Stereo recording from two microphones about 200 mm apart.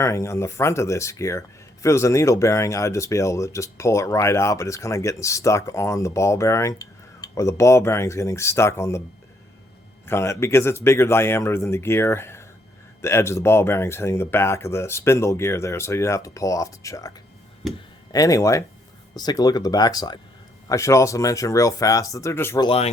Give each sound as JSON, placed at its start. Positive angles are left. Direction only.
{"t": 0.0, "sound": "speech", "side_deg": 15}
{"t": 10.1, "sound": "speech", "side_deg": 15}
{"t": 22.6, "sound": "speech", "side_deg": 30}